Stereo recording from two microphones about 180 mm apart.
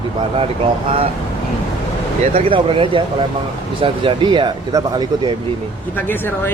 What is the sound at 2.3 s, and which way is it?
Speech, 30° right (ahead or behind).